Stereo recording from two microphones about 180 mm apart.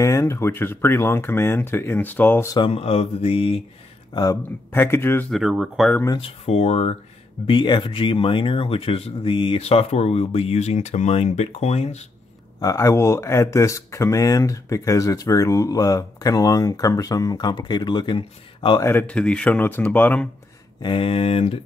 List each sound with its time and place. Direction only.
0.0 s speech: 20° left (ahead or behind)
2.5 s speech: 30° left (ahead or behind)
4.1 s speech: 20° left (ahead or behind)
5.3 s speech: centre (ahead or behind)
5.9 s speech: 20° left (ahead or behind)
6.2 s speech: 35° left (ahead or behind)
12.5 s speech: 20° left (ahead or behind)
18.9 s speech: 10° left (ahead or behind)
20.8 s speech: 30° left (ahead or behind)